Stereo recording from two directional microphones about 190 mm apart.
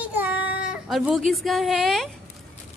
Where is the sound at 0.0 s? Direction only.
10° right (ahead or behind).